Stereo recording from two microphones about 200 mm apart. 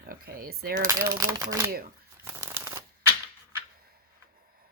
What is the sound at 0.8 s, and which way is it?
Speech, 15° right (ahead or behind).